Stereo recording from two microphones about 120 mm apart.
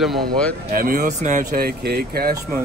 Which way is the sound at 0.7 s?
90° right.